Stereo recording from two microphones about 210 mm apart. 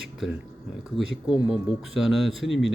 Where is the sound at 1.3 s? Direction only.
Centre (ahead or behind).